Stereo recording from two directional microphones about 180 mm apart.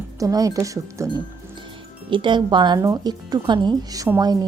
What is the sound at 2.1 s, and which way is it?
A woman's voice, 25° right (ahead or behind).